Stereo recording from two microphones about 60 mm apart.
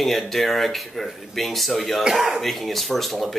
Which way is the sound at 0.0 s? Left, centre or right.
Centre.